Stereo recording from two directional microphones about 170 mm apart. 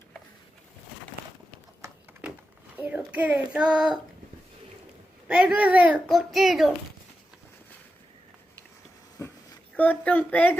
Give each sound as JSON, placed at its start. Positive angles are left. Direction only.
{"t": 2.7, "sound": "a child's voice", "side_deg": -10}
{"t": 5.3, "sound": "a child's voice", "side_deg": -5}
{"t": 9.2, "sound": "a sound", "side_deg": 15}
{"t": 9.7, "sound": "a woman's voice", "side_deg": 10}